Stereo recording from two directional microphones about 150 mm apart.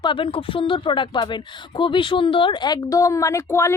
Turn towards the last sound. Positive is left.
turn(degrees=20)  # may be behind; listen again after turning